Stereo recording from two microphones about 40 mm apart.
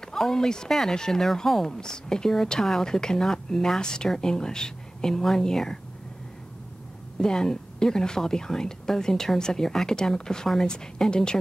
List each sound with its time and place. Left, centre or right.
0.0 s speech: centre
7.2 s speech: centre